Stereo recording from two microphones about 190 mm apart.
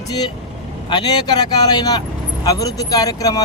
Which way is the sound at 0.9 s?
20° left (ahead or behind).